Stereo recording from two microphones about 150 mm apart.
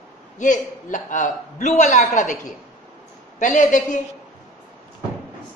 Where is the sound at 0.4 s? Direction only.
60° left (ahead or behind).